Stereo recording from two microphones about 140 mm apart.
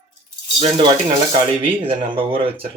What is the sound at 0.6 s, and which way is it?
Speech, 45° right (ahead or behind).